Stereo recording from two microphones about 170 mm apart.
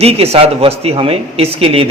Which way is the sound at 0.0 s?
35° right (ahead or behind).